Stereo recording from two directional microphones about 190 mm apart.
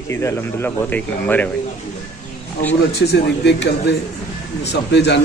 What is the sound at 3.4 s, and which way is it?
Speech, 65° left (ahead or behind).